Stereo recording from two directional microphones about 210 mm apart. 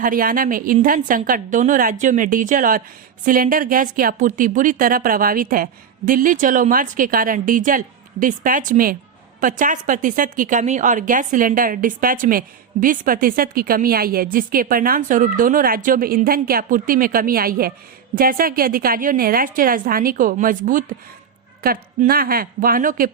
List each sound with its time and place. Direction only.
0.0 s a woman's voice: 40° right (ahead or behind)